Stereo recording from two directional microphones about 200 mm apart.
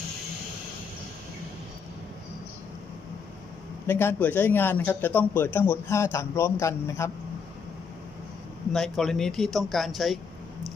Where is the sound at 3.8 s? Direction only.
10° left (ahead or behind).